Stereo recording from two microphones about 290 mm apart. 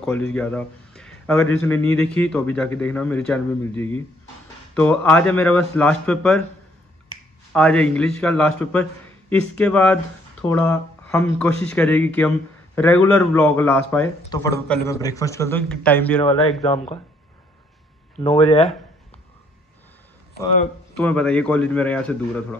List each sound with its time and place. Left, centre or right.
0.0 s speech: centre
7.5 s speech: centre
16.2 s speech: left
18.2 s speech: left
21.0 s speech: centre